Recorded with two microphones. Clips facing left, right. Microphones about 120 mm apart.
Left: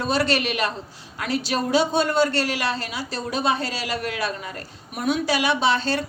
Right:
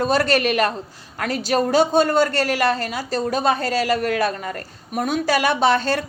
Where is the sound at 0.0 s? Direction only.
45° right (ahead or behind).